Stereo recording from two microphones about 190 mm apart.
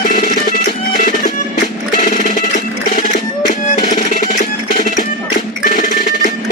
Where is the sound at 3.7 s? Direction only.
45° left (ahead or behind).